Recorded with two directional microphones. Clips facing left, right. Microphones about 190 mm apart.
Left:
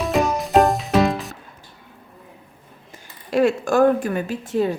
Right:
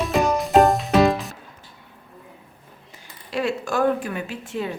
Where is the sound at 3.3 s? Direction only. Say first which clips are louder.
Left 7 dB; 45° left (ahead or behind).